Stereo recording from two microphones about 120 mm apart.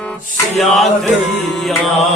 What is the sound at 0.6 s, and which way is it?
Music, centre (ahead or behind).